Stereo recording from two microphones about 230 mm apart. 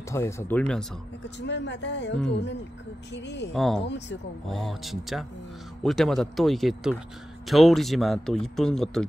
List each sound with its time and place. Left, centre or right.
0.1 s speech: centre
1.4 s speech: left
3.3 s speech: left
3.5 s speech: centre